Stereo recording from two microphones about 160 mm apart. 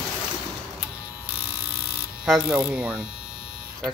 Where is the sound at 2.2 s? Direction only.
5° right (ahead or behind).